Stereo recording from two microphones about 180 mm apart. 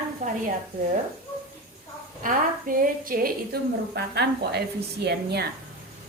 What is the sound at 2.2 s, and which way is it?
A woman's voice, 50° right (ahead or behind).